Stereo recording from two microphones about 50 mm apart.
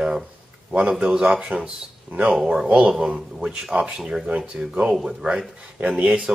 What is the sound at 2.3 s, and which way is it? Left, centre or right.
A man's voice, centre.